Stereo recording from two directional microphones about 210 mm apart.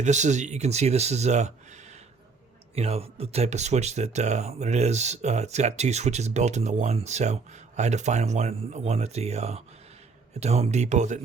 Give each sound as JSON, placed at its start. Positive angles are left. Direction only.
{"t": 0.0, "sound": "speech", "side_deg": -35}
{"t": 2.7, "sound": "speech", "side_deg": -30}